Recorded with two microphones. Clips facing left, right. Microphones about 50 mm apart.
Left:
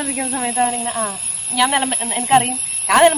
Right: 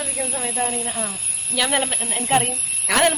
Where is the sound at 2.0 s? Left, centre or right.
Left.